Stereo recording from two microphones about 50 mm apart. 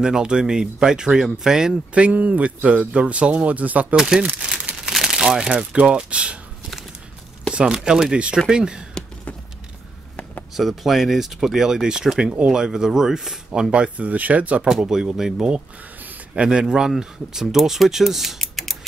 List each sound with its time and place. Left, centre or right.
0.0 s speech: centre
2.0 s a man's voice: right
3.9 s speech: centre
4.5 s crumpling: right
4.7 s crumpling: centre
5.8 s a man's voice: right
7.5 s speech: centre
10.5 s speech: centre
13.5 s a man's voice: centre
14.6 s speech: centre
15.3 s a man's voice: centre
18.4 s typing: centre